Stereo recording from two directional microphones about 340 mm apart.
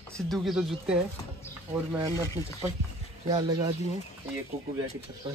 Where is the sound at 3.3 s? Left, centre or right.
Centre.